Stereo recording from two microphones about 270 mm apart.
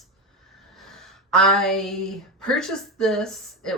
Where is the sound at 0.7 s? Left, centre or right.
Centre.